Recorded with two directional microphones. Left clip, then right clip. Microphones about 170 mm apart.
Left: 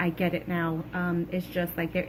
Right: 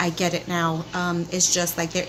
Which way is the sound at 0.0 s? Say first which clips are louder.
Right 5 dB; 40° right (ahead or behind).